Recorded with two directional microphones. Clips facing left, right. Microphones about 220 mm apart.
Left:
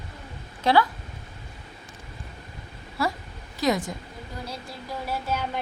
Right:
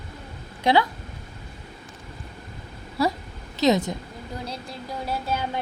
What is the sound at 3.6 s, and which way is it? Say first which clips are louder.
Speech: right 4 dB; 20° right (ahead or behind).